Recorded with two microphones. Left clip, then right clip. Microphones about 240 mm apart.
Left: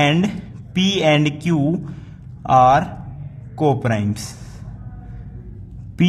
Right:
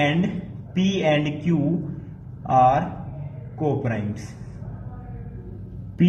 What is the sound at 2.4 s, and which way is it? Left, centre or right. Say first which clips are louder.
Speech: left 4 dB; left.